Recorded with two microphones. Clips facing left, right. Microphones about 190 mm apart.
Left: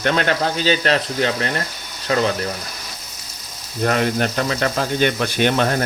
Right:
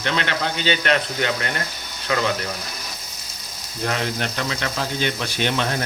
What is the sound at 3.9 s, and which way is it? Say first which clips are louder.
Speech: left 6 dB; 50° left (ahead or behind).